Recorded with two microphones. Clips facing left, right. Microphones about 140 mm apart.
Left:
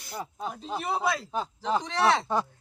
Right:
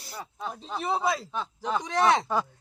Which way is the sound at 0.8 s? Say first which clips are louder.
Right 2 dB; centre (ahead or behind).